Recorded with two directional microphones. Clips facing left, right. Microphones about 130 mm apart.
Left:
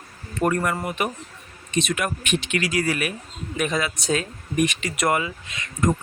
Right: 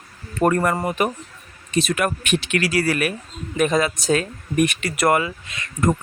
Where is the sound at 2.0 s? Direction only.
60° right (ahead or behind).